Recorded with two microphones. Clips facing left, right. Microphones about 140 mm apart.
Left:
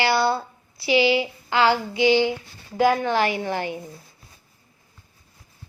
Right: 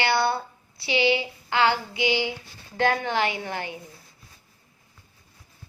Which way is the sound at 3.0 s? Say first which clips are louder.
Left 4 dB; 20° right (ahead or behind).